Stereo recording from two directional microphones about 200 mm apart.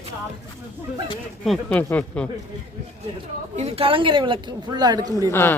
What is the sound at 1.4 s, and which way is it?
Speech, 5° left (ahead or behind).